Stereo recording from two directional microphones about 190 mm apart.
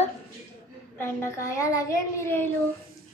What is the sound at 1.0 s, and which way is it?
A child's voice, 15° left (ahead or behind).